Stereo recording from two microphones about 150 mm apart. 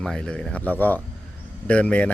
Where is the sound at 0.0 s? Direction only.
5° left (ahead or behind).